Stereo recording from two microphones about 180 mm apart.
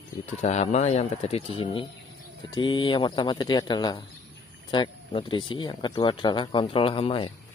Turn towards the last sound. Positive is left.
turn(degrees=30)  # may be behind; listen again after turning